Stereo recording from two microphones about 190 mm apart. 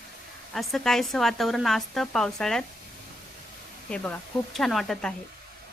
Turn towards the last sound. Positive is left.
turn(degrees=0)  # may be behind; listen again after turning